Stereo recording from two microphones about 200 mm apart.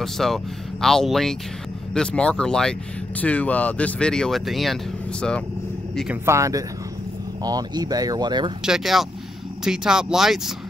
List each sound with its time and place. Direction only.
0.0 s speech: centre (ahead or behind)
6.2 s speech: 15° right (ahead or behind)
8.6 s speech: centre (ahead or behind)